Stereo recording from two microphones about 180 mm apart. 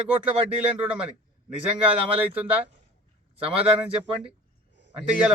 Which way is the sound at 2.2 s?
10° right (ahead or behind).